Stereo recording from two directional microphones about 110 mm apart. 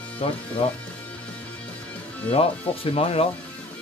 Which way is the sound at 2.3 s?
60° left (ahead or behind).